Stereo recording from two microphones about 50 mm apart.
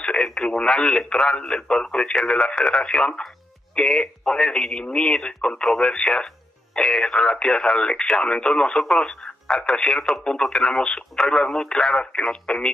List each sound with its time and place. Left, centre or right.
0.0 s radio: left
0.3 s speech: centre